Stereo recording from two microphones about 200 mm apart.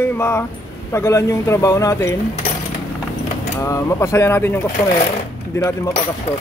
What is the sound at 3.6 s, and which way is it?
Speech, 15° left (ahead or behind).